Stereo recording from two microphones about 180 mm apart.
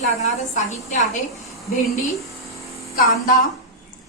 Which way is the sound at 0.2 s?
40° left (ahead or behind).